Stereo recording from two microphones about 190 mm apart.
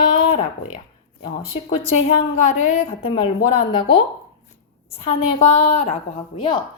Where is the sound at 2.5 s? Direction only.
40° left (ahead or behind).